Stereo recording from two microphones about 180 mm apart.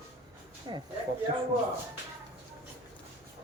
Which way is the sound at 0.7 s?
25° right (ahead or behind).